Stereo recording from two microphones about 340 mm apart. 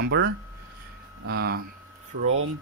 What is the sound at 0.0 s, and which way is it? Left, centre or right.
Speech, right.